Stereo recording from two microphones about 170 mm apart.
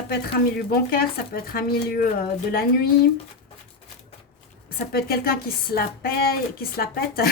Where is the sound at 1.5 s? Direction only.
60° left (ahead or behind).